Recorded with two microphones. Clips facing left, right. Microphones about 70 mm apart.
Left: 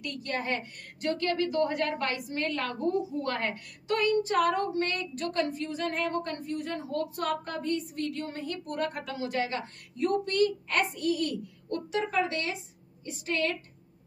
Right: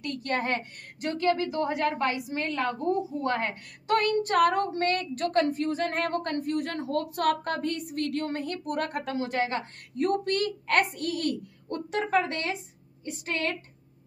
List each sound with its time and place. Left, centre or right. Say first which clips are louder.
0.0 s a woman's voice: right 4 dB; right
1.0 s a woman's voice: right 2 dB; centre
3.8 s a woman's voice: right 2 dB; right
8.9 s a woman's voice: right 3 dB; right
9.9 s a woman's voice: even; right